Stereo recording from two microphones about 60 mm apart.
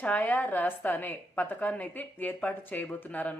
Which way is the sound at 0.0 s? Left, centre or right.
Left.